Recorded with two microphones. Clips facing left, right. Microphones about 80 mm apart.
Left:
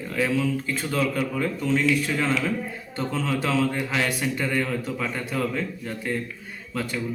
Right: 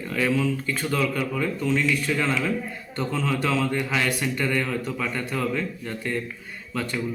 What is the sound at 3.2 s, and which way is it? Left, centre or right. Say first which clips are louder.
A man's voice: left 1 dB; left.